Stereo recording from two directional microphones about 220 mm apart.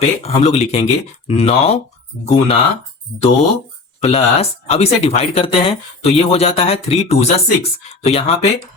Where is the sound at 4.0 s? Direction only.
25° left (ahead or behind).